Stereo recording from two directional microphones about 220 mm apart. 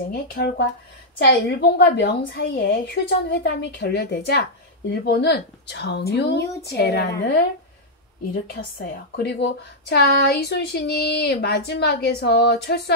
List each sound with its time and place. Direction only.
0.1 s a woman's voice: 45° left (ahead or behind)
8.5 s a woman's voice: 45° left (ahead or behind)